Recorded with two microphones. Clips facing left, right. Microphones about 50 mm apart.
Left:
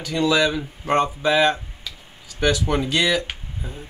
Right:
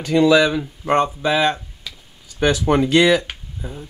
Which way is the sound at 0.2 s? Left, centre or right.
Centre.